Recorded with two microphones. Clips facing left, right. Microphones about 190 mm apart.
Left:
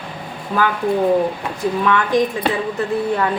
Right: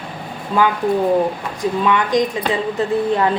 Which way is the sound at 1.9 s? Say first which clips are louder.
Even; 15° right (ahead or behind).